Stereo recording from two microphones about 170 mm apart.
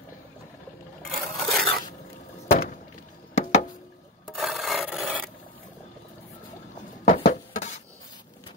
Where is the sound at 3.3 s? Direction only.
45° left (ahead or behind).